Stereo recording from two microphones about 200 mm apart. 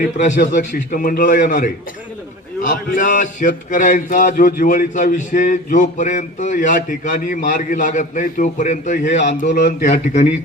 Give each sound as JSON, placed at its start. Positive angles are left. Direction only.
{"t": 0.0, "sound": "a man's voice", "side_deg": 40}
{"t": 9.5, "sound": "a man's voice", "side_deg": 50}